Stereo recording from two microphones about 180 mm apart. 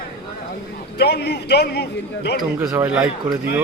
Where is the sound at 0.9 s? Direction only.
65° left (ahead or behind).